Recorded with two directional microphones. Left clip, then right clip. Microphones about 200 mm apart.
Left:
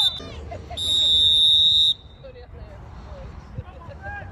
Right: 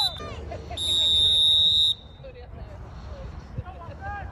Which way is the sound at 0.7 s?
15° right (ahead or behind).